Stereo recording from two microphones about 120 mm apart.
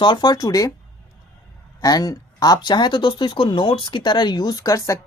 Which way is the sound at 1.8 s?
30° left (ahead or behind).